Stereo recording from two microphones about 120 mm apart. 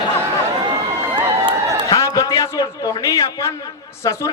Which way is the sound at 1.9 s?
30° left (ahead or behind).